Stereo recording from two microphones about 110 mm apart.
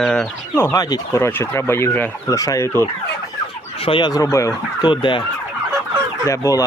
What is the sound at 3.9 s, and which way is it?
Fowl, 50° left (ahead or behind).